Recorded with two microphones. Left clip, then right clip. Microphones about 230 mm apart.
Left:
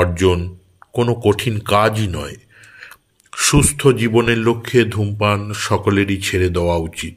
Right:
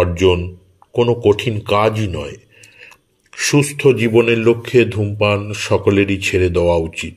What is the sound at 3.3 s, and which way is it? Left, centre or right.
A man's voice, left.